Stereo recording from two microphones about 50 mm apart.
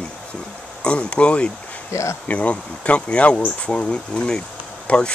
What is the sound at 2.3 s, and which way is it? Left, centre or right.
Speech, left.